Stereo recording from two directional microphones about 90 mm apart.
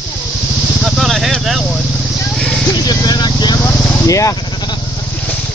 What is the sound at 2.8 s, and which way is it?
Vehicle, 45° left (ahead or behind).